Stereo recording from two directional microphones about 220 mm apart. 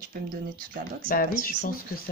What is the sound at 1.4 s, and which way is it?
Speech, 40° left (ahead or behind).